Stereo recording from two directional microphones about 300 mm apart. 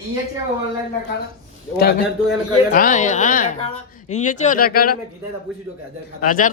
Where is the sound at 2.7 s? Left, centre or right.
Left.